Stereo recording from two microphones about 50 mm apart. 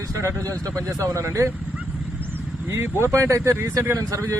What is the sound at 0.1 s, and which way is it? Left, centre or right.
Speech, right.